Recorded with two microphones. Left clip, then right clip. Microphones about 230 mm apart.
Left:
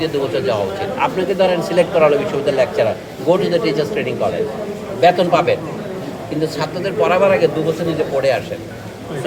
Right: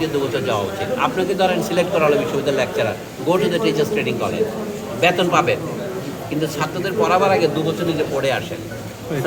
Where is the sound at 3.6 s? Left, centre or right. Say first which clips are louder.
Left 1 dB; centre.